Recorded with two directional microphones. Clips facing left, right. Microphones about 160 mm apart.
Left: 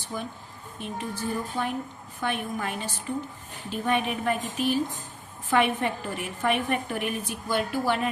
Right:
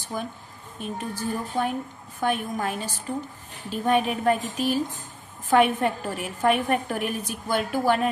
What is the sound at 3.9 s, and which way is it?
A woman's voice, 40° right (ahead or behind).